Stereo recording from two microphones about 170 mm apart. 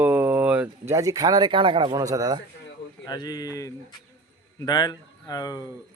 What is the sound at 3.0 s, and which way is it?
Speech, 25° left (ahead or behind).